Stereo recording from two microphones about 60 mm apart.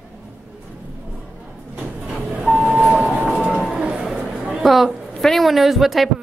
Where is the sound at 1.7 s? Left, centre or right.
Centre.